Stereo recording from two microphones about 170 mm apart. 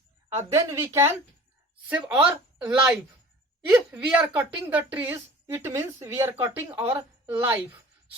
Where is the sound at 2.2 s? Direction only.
5° right (ahead or behind).